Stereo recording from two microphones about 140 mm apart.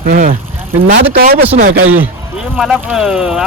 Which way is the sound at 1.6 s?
75° right (ahead or behind).